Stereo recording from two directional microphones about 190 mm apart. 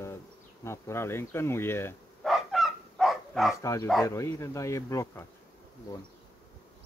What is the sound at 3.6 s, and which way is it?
Speech, 15° left (ahead or behind).